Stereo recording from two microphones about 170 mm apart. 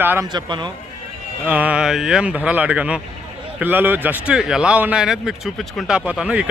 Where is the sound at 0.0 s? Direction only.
10° right (ahead or behind).